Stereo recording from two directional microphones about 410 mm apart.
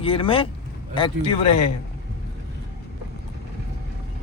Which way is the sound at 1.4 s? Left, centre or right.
Left.